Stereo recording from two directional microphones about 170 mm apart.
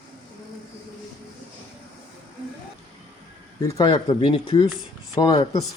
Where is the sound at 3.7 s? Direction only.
30° left (ahead or behind).